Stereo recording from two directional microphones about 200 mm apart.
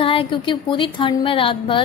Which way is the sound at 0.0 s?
25° left (ahead or behind).